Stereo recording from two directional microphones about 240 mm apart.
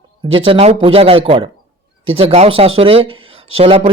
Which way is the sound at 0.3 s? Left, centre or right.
Right.